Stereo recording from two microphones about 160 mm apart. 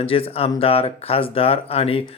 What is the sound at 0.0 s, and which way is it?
Speech, 35° left (ahead or behind).